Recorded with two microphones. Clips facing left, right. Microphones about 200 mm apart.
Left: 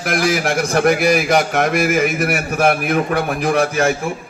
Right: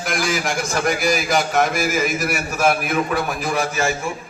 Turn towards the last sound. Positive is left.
turn(degrees=60)  # may be behind; listen again after turning